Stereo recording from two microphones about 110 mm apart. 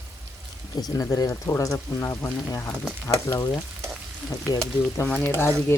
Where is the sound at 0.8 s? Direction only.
35° left (ahead or behind).